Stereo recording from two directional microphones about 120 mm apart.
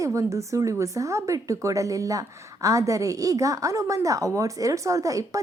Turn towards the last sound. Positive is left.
turn(degrees=-25)  # may be behind; listen again after turning